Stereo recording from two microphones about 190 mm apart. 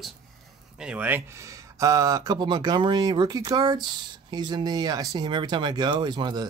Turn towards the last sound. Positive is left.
turn(degrees=-25)  # may be behind; listen again after turning